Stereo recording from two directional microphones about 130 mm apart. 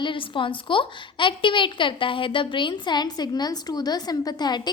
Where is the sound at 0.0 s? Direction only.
40° left (ahead or behind).